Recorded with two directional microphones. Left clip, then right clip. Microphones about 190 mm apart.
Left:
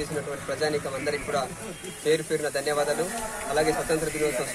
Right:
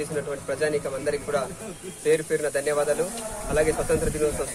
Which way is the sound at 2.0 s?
25° right (ahead or behind).